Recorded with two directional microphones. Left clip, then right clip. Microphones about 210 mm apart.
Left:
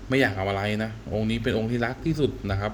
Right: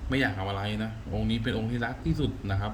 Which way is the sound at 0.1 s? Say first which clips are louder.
Left 6 dB; 20° left (ahead or behind).